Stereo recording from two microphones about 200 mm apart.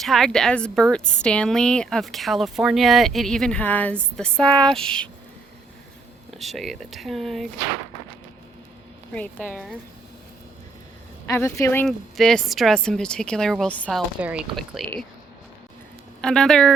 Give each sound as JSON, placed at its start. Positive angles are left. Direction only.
{"t": 0.0, "sound": "speech", "side_deg": 0}
{"t": 6.3, "sound": "speech", "side_deg": 0}
{"t": 9.1, "sound": "speech", "side_deg": 5}
{"t": 11.3, "sound": "speech", "side_deg": 15}
{"t": 14.2, "sound": "speech", "side_deg": -5}
{"t": 16.2, "sound": "speech", "side_deg": 5}